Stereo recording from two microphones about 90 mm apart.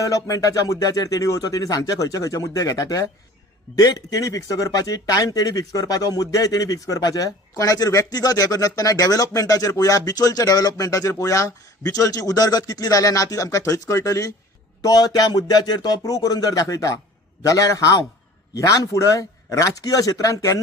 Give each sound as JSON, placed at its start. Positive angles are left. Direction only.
{"t": 0.0, "sound": "speech", "side_deg": 40}